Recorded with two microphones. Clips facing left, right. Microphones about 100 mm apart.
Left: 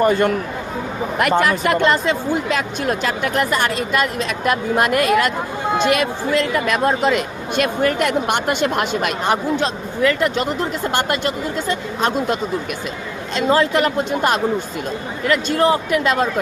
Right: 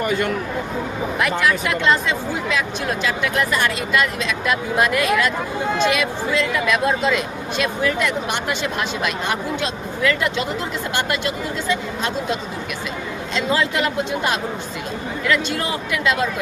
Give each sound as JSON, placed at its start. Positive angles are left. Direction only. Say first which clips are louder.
{"t": 0.0, "sound": "speech", "louder": "left 5 dB", "side_deg": 40}
{"t": 9.2, "sound": "speech", "louder": "left 5 dB", "side_deg": 35}